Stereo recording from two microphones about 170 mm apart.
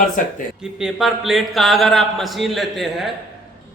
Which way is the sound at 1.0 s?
Centre (ahead or behind).